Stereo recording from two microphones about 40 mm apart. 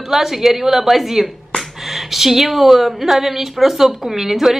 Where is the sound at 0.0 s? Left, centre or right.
Centre.